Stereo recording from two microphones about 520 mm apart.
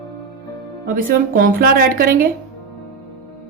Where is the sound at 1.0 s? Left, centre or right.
Centre.